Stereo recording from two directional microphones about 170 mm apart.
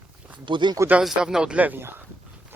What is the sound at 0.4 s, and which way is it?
Speech, 25° right (ahead or behind).